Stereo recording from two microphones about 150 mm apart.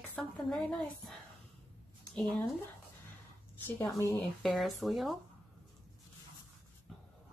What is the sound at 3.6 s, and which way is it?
Speech, 15° left (ahead or behind).